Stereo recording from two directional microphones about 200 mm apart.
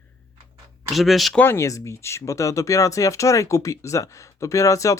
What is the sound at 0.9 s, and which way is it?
Speech, centre (ahead or behind).